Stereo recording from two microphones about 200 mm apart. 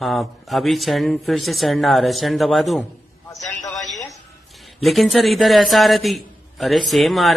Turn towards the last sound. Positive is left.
turn(degrees=0)  # may be behind; listen again after turning